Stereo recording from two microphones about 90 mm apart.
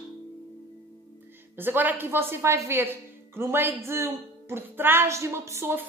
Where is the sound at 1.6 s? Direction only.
20° right (ahead or behind).